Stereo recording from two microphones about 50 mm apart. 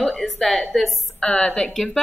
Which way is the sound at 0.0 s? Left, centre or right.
Centre.